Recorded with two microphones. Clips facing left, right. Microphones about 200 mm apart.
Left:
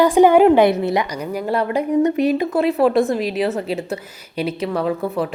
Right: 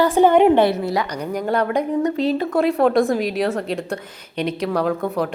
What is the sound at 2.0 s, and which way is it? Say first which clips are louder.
Speech: left 3 dB; 15° left (ahead or behind).